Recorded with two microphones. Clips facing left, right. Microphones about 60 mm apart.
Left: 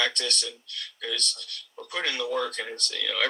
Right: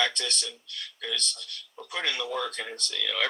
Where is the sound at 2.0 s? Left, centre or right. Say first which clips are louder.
Left 3 dB; right.